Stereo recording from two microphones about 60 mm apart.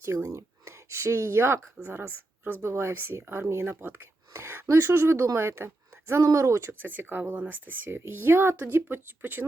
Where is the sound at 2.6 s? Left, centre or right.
Right.